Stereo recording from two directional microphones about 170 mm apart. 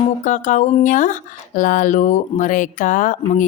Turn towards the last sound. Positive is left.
turn(degrees=50)  # may be behind; listen again after turning